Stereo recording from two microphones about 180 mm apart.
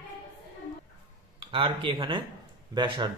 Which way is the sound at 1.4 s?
30° right (ahead or behind).